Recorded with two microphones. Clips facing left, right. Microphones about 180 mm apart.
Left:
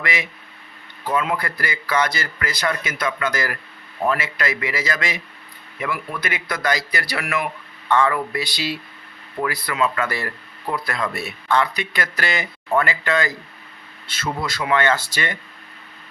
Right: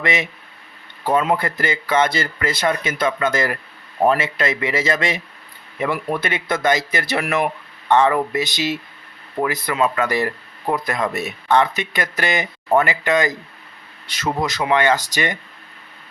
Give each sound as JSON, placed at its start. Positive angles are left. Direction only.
{"t": 0.0, "sound": "speech", "side_deg": -25}
{"t": 1.1, "sound": "speech", "side_deg": -40}
{"t": 1.4, "sound": "speech", "side_deg": -25}
{"t": 14.4, "sound": "speech", "side_deg": -20}